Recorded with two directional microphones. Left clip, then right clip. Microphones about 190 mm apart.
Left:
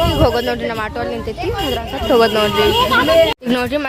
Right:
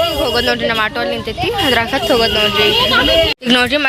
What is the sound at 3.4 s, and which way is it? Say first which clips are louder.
Speech: right 5 dB; 5° left (ahead or behind).